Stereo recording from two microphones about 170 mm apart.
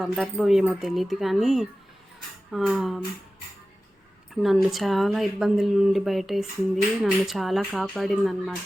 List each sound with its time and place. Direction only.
0.0 s speech: centre (ahead or behind)
4.4 s speech: centre (ahead or behind)